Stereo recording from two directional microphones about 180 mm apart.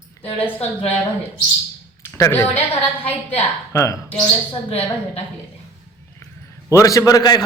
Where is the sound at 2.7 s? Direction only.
35° left (ahead or behind).